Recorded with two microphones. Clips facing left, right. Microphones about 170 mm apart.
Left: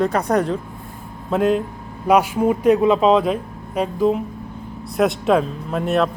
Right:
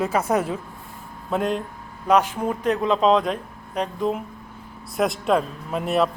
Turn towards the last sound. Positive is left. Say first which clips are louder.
# left 3 dB
turn(degrees=0)  # may be behind; listen again after turning